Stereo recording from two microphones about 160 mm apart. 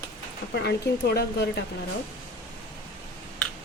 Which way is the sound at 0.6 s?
90° left.